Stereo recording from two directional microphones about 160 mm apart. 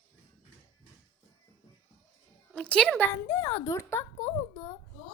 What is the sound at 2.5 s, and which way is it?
A woman's voice, 5° left (ahead or behind).